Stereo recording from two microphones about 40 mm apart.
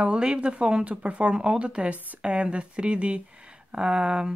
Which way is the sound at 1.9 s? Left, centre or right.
Right.